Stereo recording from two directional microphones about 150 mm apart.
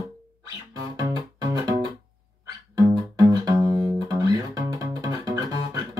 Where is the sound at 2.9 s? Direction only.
25° right (ahead or behind).